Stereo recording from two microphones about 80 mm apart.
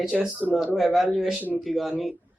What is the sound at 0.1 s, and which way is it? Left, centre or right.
A man's voice, centre.